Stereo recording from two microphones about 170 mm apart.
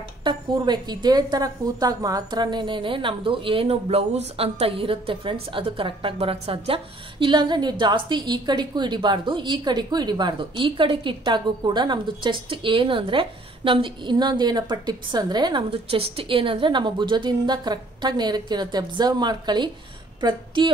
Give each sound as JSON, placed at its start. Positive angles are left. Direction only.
{"t": 0.2, "sound": "a woman's voice", "side_deg": -25}